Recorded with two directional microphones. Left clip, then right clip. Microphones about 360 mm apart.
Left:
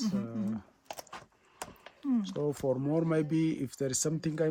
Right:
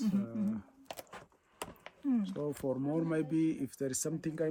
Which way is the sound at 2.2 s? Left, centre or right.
Left.